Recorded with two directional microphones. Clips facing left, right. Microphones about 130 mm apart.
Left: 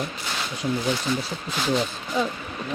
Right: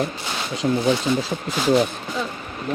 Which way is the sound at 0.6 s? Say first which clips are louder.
Right 5 dB; 60° right (ahead or behind).